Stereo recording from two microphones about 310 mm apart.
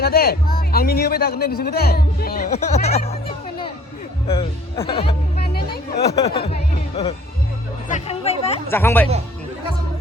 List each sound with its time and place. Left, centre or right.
0.0 s speech: left
5.5 s music: left
6.1 s music: centre
7.9 s chatter: left
8.7 s a woman's voice: centre